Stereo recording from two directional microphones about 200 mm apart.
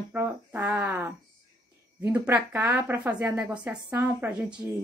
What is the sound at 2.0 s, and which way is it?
Speech, 10° right (ahead or behind).